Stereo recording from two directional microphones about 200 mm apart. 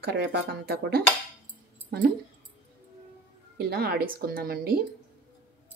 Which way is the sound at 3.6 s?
50° right (ahead or behind).